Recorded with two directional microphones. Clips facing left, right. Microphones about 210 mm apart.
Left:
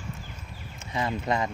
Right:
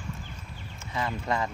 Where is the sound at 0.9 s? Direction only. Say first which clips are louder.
Left 2 dB; 20° left (ahead or behind).